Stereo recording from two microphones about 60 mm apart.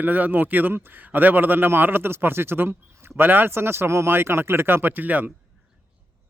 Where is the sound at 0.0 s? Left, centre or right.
Right.